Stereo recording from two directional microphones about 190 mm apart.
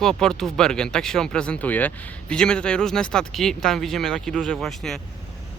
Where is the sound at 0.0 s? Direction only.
5° left (ahead or behind).